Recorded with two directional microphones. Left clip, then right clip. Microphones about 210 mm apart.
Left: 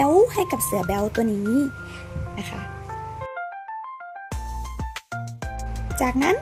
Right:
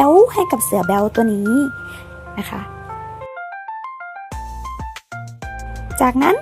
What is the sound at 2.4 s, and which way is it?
Music, 15° right (ahead or behind).